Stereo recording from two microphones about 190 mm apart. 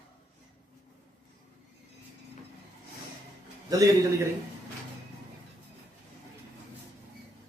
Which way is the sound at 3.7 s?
20° right (ahead or behind).